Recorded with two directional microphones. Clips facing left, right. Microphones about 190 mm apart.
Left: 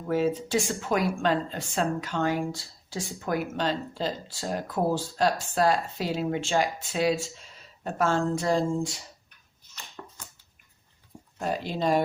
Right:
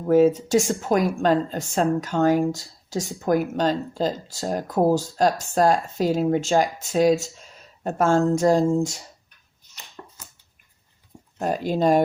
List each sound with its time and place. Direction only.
0.1 s speech: 45° right (ahead or behind)
11.3 s speech: 45° right (ahead or behind)